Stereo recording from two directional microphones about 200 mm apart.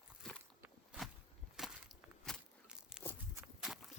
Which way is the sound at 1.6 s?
5° right (ahead or behind).